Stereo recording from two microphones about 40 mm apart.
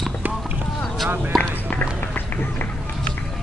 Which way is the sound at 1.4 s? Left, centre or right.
Left.